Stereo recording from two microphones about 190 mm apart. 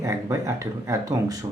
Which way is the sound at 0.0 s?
15° right (ahead or behind).